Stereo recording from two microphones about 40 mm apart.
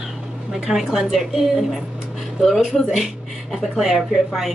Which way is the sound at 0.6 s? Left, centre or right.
Centre.